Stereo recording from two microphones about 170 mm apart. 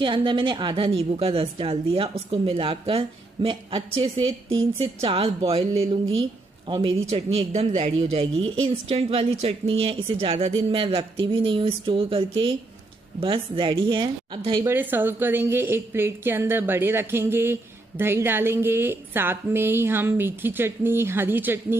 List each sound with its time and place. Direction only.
0.0 s a man's voice: 30° right (ahead or behind)
14.6 s a woman's voice: 10° right (ahead or behind)